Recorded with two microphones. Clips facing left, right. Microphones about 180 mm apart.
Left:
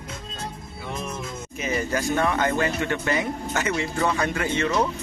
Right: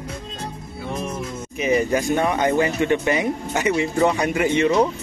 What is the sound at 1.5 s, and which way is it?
Speech, 15° right (ahead or behind).